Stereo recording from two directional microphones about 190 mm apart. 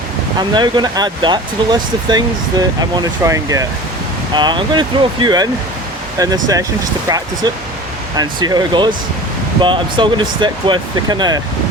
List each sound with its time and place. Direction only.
0.3 s speech: 20° right (ahead or behind)